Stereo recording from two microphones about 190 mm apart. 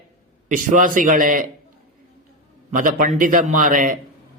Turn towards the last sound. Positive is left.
turn(degrees=-45)  # may be behind; listen again after turning